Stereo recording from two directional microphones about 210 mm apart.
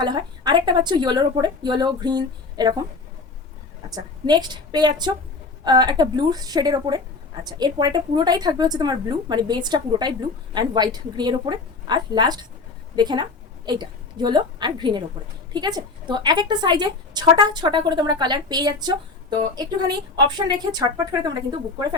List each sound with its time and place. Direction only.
0.0 s a woman's voice: 20° right (ahead or behind)
3.9 s a woman's voice: 20° right (ahead or behind)